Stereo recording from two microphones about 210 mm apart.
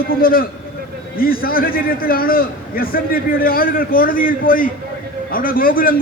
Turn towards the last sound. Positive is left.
turn(degrees=45)  # may be behind; listen again after turning